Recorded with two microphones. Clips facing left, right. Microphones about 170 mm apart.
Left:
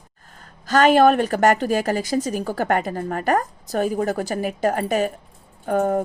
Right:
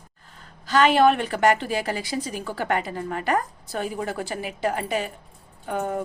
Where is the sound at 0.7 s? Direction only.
45° left (ahead or behind).